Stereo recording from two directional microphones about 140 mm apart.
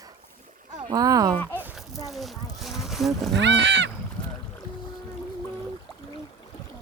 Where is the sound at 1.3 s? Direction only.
10° left (ahead or behind).